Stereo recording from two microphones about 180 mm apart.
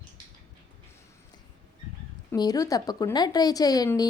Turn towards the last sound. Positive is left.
turn(degrees=20)  # may be behind; listen again after turning